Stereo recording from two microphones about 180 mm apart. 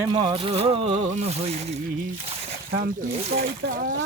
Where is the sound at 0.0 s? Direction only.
25° right (ahead or behind).